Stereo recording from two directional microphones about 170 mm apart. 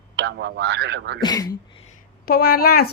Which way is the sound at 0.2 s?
90° right.